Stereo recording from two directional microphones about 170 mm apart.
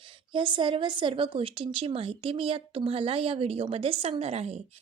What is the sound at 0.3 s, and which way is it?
Speech, 30° right (ahead or behind).